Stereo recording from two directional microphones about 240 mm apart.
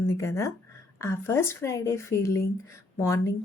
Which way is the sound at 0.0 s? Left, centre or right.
Centre.